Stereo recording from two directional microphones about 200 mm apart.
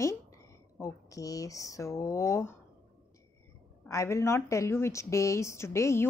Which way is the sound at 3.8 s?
15° left (ahead or behind).